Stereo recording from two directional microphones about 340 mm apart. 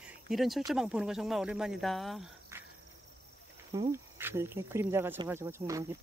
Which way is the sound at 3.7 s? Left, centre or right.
Centre.